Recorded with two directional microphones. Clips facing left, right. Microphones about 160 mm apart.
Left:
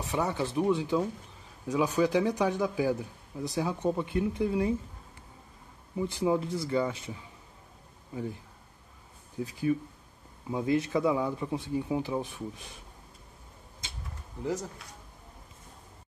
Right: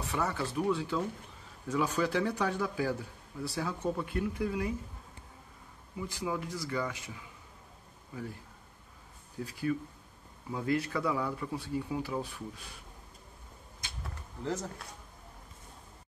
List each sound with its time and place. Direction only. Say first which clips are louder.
0.0 s a man's voice: left 3 dB; 20° left (ahead or behind)
5.9 s speech: left 8 dB; 25° left (ahead or behind)
8.1 s a man's voice: left 5 dB; 20° left (ahead or behind)
9.4 s speech: left 4 dB; 20° left (ahead or behind)
14.4 s a man's voice: left 3 dB; 15° left (ahead or behind)